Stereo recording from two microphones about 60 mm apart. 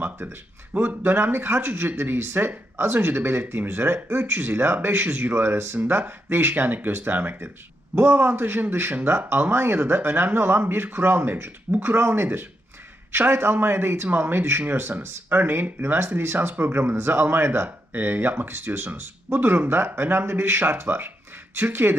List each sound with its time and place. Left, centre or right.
0.0 s speech: right